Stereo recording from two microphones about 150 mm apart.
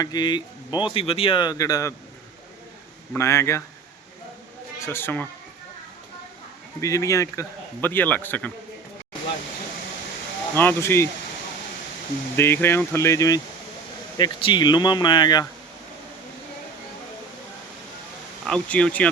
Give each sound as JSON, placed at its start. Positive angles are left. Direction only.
{"t": 0.0, "sound": "speech", "side_deg": 30}
{"t": 3.2, "sound": "speech", "side_deg": 20}
{"t": 4.8, "sound": "a man's voice", "side_deg": 15}
{"t": 6.8, "sound": "a man's voice", "side_deg": 20}
{"t": 10.5, "sound": "a man's voice", "side_deg": 15}
{"t": 12.4, "sound": "a man's voice", "side_deg": 15}
{"t": 18.4, "sound": "a man's voice", "side_deg": 5}